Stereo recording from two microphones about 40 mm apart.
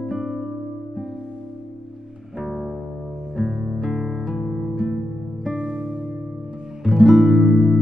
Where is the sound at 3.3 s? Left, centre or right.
Centre.